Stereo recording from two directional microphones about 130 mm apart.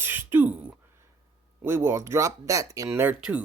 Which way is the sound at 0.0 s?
15° right (ahead or behind).